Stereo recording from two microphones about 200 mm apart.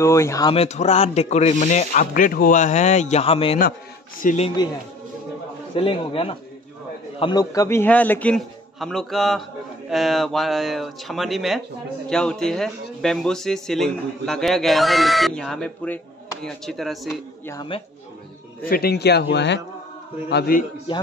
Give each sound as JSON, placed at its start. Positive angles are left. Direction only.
{"t": 0.0, "sound": "a man's voice", "side_deg": 15}
{"t": 0.6, "sound": "speech", "side_deg": 35}
{"t": 4.2, "sound": "speech", "side_deg": 40}
{"t": 5.8, "sound": "a man's voice", "side_deg": 30}
{"t": 17.1, "sound": "speech", "side_deg": 15}
{"t": 18.7, "sound": "a man's voice", "side_deg": 50}
{"t": 20.9, "sound": "a man's voice", "side_deg": 25}